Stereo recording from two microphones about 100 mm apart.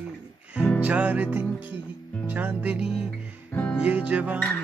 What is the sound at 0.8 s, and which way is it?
Music, 15° right (ahead or behind).